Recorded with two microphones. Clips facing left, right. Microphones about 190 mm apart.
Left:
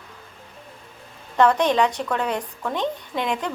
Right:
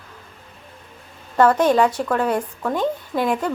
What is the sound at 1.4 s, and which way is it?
Speech, 5° right (ahead or behind).